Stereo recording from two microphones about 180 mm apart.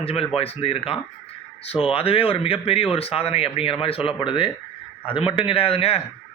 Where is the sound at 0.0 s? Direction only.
35° left (ahead or behind).